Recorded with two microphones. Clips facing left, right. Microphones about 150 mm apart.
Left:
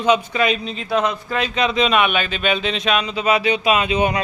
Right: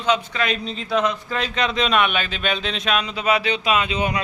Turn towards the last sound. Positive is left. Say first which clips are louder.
# left 4 dB
turn(degrees=20)  # may be behind; listen again after turning